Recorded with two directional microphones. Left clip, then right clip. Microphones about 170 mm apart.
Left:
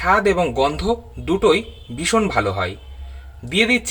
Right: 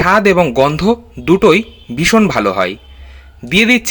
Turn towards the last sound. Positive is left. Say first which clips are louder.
# right 6 dB
turn(degrees=-30)  # may be behind; listen again after turning